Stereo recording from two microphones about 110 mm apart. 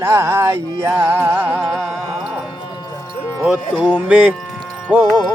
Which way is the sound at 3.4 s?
10° right (ahead or behind).